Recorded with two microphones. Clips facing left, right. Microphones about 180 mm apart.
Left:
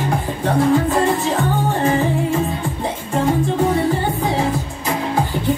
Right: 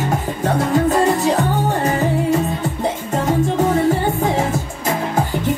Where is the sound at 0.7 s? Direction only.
40° right (ahead or behind).